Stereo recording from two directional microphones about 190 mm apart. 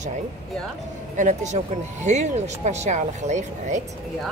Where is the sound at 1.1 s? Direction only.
40° right (ahead or behind).